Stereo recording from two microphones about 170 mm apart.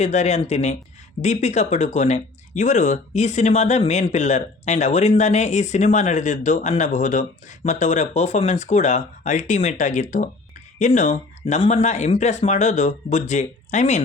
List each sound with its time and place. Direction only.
0.0 s speech: 40° left (ahead or behind)